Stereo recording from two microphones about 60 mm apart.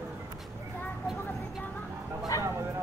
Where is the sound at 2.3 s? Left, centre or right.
Left.